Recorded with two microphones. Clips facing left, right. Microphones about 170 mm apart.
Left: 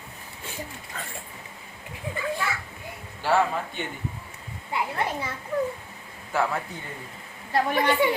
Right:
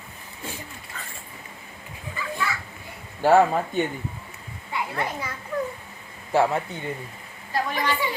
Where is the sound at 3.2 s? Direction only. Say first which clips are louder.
Right 6 dB; 45° right (ahead or behind).